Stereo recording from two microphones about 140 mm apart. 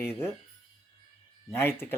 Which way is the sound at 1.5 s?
15° left (ahead or behind).